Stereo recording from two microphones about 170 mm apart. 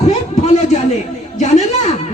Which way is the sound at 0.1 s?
40° left (ahead or behind).